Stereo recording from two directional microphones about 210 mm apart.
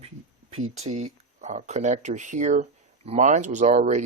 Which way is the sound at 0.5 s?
30° right (ahead or behind).